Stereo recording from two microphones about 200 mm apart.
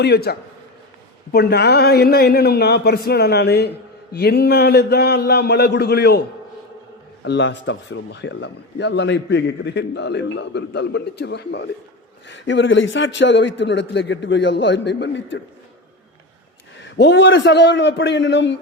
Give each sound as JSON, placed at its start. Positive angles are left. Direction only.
{"t": 0.0, "sound": "a man's voice", "side_deg": 55}
{"t": 7.3, "sound": "speech", "side_deg": 60}
{"t": 16.8, "sound": "speech", "side_deg": 60}